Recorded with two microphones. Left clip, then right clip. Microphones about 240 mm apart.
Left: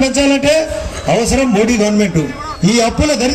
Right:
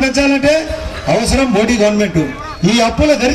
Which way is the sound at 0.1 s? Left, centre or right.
Right.